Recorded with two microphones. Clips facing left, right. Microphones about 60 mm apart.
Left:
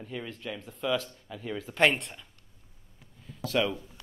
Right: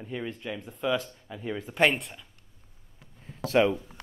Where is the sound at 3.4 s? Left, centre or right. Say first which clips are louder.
Right 5 dB; right.